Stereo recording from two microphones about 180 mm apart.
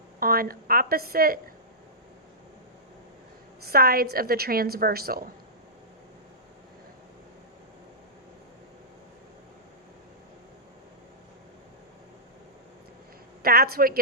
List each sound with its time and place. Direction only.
0.2 s a woman's voice: 55° right (ahead or behind)
3.7 s a woman's voice: 55° right (ahead or behind)
13.4 s a woman's voice: 55° right (ahead or behind)